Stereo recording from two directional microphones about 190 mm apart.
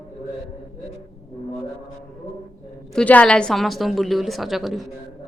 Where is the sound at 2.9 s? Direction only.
5° left (ahead or behind).